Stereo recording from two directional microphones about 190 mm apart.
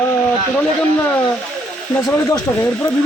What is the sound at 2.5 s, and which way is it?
Speech, 15° left (ahead or behind).